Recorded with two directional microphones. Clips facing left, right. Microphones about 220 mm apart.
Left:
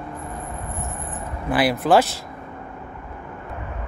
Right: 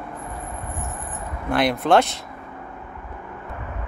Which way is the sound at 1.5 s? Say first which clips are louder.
Left 1 dB; 5° left (ahead or behind).